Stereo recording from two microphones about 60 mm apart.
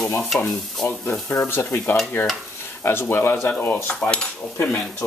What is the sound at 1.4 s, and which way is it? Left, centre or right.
Speech, left.